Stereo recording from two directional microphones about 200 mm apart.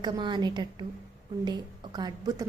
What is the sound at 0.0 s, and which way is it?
A woman's voice, 20° right (ahead or behind).